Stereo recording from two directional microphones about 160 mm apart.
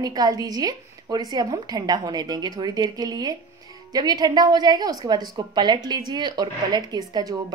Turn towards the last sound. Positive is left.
turn(degrees=-25)  # may be behind; listen again after turning